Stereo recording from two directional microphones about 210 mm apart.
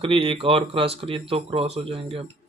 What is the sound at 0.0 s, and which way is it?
Speech, 25° right (ahead or behind).